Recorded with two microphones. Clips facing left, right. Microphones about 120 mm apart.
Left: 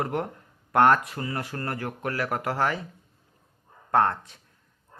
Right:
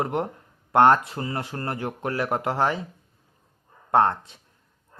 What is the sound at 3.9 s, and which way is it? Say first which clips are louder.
Speech: right 2 dB; 20° right (ahead or behind).